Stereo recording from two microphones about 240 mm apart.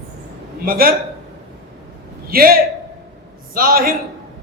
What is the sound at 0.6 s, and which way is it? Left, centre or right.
Speech, right.